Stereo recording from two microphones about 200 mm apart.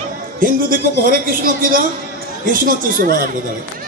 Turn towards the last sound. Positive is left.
turn(degrees=-45)  # may be behind; listen again after turning